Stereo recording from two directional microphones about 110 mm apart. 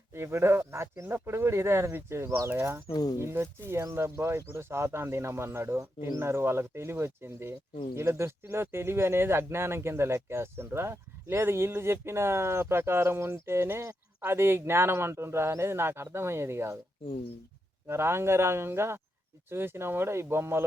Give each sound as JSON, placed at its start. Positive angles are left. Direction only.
{"t": 0.1, "sound": "speech", "side_deg": -25}
{"t": 17.8, "sound": "speech", "side_deg": -25}